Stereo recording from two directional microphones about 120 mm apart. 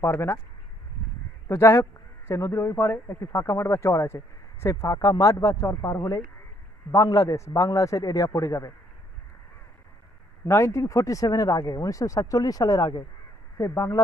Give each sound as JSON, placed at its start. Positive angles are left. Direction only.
{"t": 0.0, "sound": "speech", "side_deg": 20}
{"t": 1.5, "sound": "speech", "side_deg": 20}
{"t": 10.4, "sound": "speech", "side_deg": 25}